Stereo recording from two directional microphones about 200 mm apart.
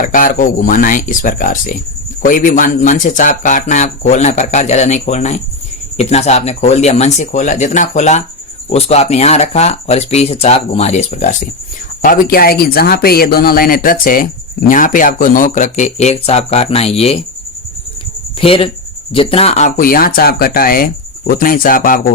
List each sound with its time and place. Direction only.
0.0 s speech: 40° left (ahead or behind)
18.3 s speech: 25° left (ahead or behind); by 22.1 s 45° left (ahead or behind)